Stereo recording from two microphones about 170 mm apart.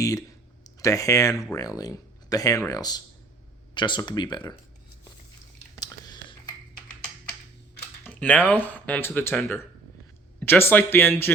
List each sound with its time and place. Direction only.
0.0 s speech: 20° left (ahead or behind)
5.8 s a sound: 25° left (ahead or behind)
8.1 s speech: 10° left (ahead or behind)